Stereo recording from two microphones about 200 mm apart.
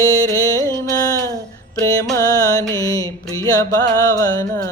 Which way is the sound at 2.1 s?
20° left (ahead or behind).